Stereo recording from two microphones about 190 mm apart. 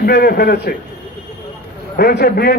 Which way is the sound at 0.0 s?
55° left (ahead or behind).